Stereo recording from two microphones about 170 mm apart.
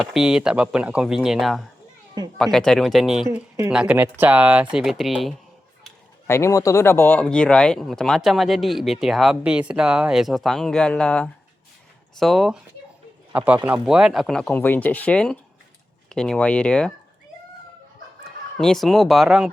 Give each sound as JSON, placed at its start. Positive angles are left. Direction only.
{"t": 0.0, "sound": "speech", "side_deg": 0}
{"t": 3.2, "sound": "speech", "side_deg": -15}
{"t": 6.2, "sound": "speech", "side_deg": 15}
{"t": 18.5, "sound": "speech", "side_deg": 5}